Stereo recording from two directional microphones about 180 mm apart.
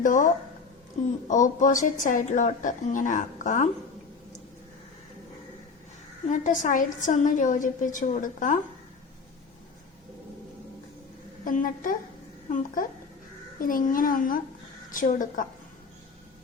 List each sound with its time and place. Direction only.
0.0 s a woman's voice: 45° left (ahead or behind)
6.2 s a woman's voice: 45° left (ahead or behind)
11.4 s a woman's voice: 50° left (ahead or behind)